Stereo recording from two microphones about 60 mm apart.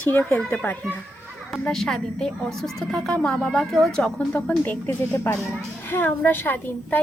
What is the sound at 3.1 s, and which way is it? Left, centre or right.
Speech, centre.